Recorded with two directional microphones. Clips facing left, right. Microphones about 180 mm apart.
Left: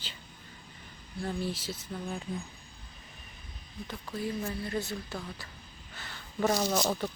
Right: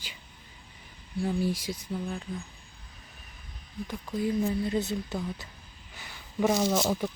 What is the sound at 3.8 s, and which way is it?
A woman's voice, 15° right (ahead or behind).